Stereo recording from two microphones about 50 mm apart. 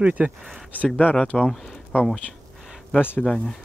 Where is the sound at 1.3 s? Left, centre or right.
Centre.